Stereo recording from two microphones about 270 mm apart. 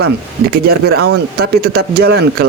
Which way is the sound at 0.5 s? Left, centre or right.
Right.